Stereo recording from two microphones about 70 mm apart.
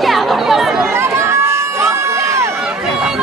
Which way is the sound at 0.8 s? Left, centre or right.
Right.